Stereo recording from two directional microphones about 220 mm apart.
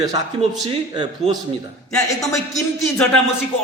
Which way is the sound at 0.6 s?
20° right (ahead or behind).